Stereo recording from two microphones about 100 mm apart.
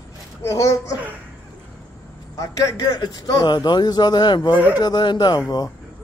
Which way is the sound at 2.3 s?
35° left (ahead or behind).